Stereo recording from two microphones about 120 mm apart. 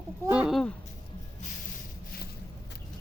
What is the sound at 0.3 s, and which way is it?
Speech, 10° right (ahead or behind).